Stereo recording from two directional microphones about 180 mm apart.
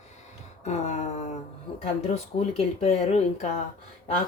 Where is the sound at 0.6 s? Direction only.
40° left (ahead or behind).